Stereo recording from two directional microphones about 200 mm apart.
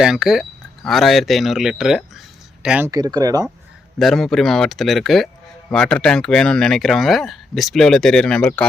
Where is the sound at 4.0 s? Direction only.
Centre (ahead or behind).